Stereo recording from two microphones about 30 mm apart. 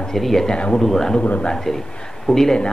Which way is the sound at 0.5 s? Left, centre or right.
Left.